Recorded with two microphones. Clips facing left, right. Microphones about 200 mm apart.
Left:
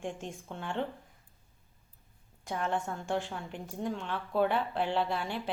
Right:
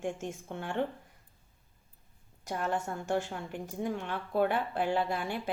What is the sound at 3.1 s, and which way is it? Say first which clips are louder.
Speech: right 2 dB; 45° right (ahead or behind).